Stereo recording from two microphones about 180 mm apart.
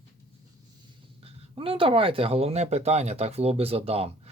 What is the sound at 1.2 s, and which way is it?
Speech, 30° right (ahead or behind).